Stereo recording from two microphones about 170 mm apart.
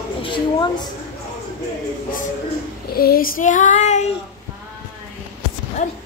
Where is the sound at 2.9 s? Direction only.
60° left (ahead or behind); by 4.1 s 45° left (ahead or behind).